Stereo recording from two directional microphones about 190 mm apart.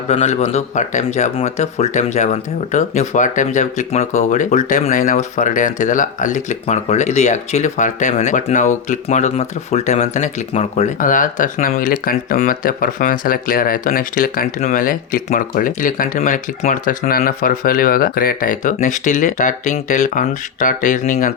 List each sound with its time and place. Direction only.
0.1 s speech: 35° left (ahead or behind)